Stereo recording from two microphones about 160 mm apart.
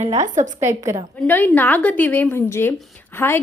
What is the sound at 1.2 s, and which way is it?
A woman's voice, 10° left (ahead or behind).